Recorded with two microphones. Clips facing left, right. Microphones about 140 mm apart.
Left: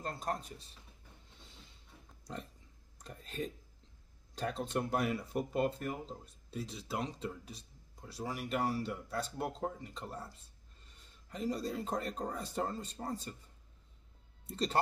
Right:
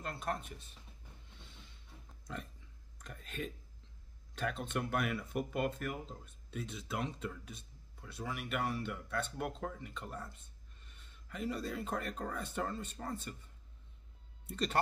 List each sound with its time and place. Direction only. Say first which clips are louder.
0.0 s speech: left 1 dB; 35° left (ahead or behind)
2.3 s speech: left 1 dB; 35° left (ahead or behind)
14.4 s speech: left 1 dB; 30° left (ahead or behind)